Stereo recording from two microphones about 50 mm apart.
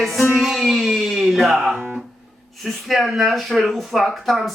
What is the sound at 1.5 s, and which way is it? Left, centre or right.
Speech, centre.